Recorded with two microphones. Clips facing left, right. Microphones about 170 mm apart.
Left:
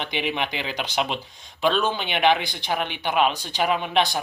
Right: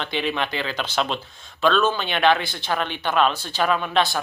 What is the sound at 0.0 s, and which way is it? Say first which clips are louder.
Speech: right 2 dB; 15° left (ahead or behind).